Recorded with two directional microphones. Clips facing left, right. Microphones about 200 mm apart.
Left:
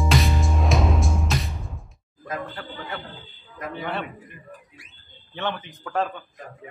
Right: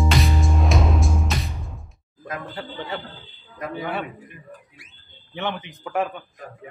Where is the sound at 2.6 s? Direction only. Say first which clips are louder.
Right 3 dB; 25° right (ahead or behind).